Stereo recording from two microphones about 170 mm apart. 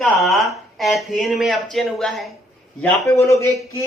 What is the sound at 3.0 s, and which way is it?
Speech, 20° left (ahead or behind).